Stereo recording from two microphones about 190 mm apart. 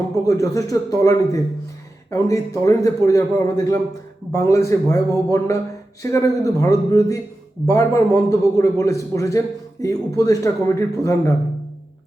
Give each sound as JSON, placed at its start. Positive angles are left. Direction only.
{"t": 0.1, "sound": "a man's voice", "side_deg": 15}